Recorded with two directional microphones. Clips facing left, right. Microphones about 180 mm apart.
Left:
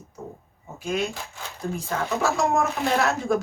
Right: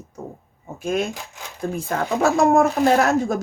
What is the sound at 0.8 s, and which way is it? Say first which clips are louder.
Speech: right 4 dB; 55° right (ahead or behind).